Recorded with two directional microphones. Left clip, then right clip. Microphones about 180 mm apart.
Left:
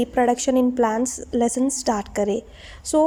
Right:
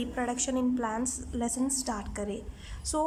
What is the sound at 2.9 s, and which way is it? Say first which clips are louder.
Speech: left 12 dB; 20° left (ahead or behind).